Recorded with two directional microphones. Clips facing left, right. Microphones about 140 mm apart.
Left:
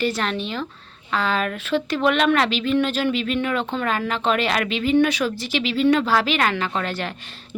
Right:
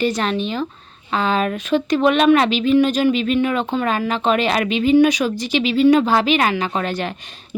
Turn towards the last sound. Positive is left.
turn(degrees=-15)  # may be behind; listen again after turning